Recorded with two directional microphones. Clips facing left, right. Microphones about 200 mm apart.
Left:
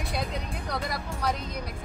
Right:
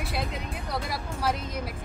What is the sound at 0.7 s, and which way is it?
Speech, 5° right (ahead or behind).